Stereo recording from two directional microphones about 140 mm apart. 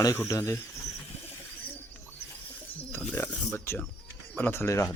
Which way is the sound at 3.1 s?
15° left (ahead or behind).